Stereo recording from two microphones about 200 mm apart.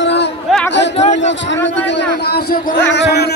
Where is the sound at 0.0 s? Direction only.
60° left (ahead or behind).